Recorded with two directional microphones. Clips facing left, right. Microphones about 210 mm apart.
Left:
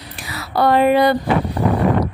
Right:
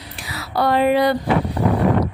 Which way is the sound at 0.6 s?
55° left (ahead or behind).